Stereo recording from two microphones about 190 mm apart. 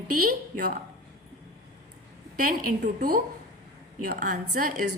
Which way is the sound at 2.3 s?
50° right (ahead or behind).